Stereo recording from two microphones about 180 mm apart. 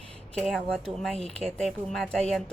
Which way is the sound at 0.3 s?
Centre (ahead or behind).